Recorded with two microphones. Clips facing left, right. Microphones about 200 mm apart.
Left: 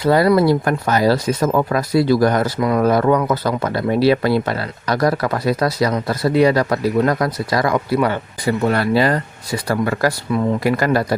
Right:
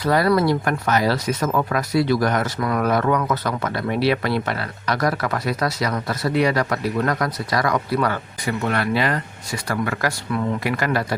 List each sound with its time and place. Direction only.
0.0 s speech: 25° left (ahead or behind)